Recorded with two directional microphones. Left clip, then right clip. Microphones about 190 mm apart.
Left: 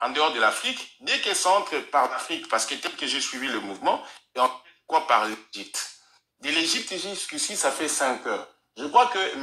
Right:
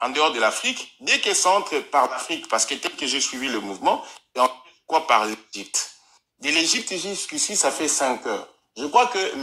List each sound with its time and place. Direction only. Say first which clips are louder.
0.0 s speech: right 2 dB; 35° right (ahead or behind)
1.0 s speech: right 4 dB; 40° right (ahead or behind)
1.4 s speech: right 2 dB; 25° right (ahead or behind)
2.5 s speech: right 3 dB; 45° right (ahead or behind)
3.3 s speech: right 2 dB; 25° right (ahead or behind)
5.0 s speech: right 2 dB; 40° right (ahead or behind)
8.0 s speech: right 2 dB; 30° right (ahead or behind)